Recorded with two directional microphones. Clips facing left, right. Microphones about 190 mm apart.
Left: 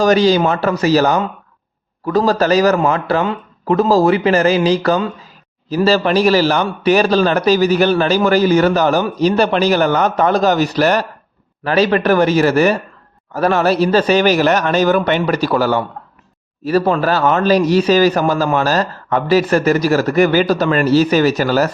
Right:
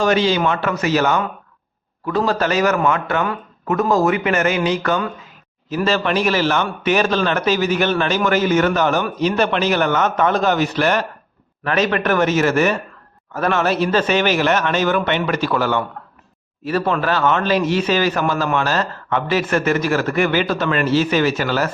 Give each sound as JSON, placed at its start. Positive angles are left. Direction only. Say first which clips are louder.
{"t": 0.0, "sound": "a man's voice", "louder": "left 5 dB", "side_deg": 40}